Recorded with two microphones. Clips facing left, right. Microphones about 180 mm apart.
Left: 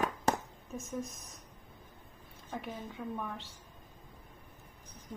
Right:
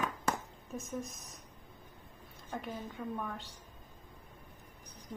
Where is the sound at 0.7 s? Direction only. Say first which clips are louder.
Left 1 dB; centre (ahead or behind).